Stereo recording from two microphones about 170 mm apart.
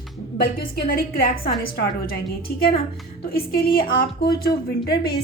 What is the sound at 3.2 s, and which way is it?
A woman's voice, 60° left (ahead or behind).